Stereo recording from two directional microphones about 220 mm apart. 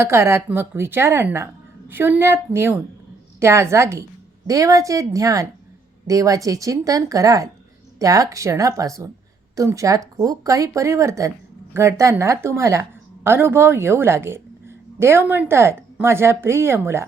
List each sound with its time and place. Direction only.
0.0 s a woman's voice: 10° right (ahead or behind)